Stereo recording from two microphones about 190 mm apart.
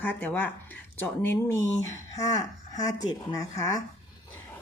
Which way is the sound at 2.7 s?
20° left (ahead or behind).